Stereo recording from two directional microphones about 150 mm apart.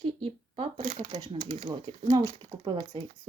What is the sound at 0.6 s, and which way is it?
Speech, 55° right (ahead or behind).